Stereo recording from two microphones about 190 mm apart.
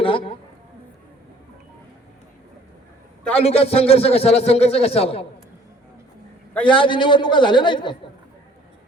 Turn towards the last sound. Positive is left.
turn(degrees=25)  # may be behind; listen again after turning